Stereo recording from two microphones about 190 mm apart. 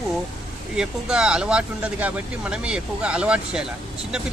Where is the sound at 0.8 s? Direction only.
5° right (ahead or behind).